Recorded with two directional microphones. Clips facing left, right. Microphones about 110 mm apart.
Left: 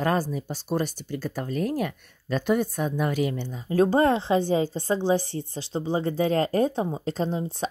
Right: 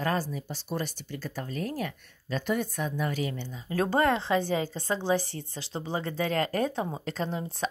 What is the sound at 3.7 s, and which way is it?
A woman's voice, 30° left (ahead or behind).